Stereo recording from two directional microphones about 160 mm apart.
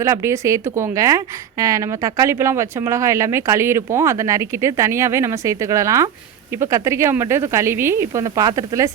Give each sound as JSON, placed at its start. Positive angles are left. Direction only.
{"t": 0.0, "sound": "a woman's voice", "side_deg": -20}